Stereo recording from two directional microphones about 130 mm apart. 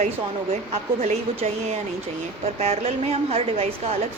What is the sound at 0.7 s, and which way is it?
A woman's voice, 55° right (ahead or behind).